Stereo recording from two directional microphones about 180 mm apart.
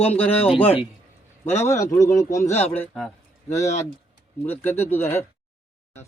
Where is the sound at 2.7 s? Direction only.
10° left (ahead or behind).